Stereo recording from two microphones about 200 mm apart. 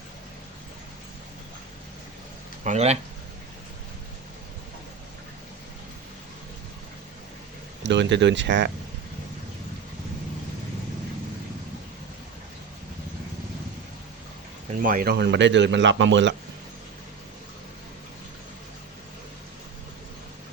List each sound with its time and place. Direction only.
2.6 s speech: 35° right (ahead or behind)
7.9 s a man's voice: 60° right (ahead or behind)
14.8 s a man's voice: 45° right (ahead or behind); by 16.3 s 65° right (ahead or behind)